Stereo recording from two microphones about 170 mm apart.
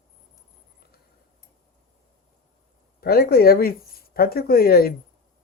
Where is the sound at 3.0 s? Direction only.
60° left (ahead or behind).